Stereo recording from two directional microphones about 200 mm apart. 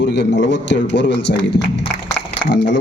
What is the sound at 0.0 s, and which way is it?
Speech, 60° left (ahead or behind).